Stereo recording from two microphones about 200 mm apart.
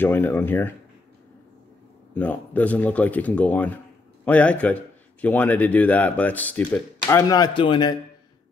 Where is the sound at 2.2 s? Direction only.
10° left (ahead or behind).